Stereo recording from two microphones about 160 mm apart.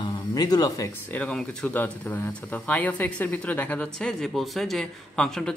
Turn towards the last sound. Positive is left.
turn(degrees=5)  # may be behind; listen again after turning